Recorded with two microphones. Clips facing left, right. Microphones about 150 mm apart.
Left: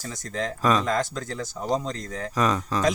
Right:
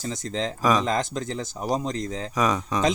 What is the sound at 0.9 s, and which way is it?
Speech, 20° right (ahead or behind).